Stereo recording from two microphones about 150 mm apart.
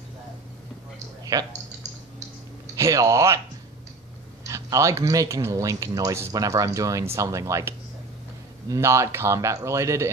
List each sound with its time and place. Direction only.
1.3 s speech: 25° right (ahead or behind)
2.7 s speech: 20° right (ahead or behind)
4.5 s speech: 20° right (ahead or behind)